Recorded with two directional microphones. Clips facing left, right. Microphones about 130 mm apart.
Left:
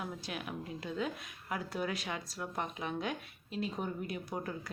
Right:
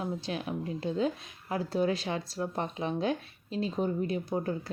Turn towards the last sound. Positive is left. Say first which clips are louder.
# right 8 dB
turn(degrees=-30)  # may be behind; listen again after turning